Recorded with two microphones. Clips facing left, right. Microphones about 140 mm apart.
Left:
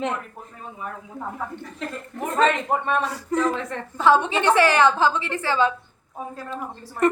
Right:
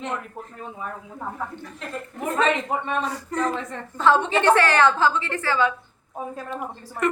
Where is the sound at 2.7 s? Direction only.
45° left (ahead or behind).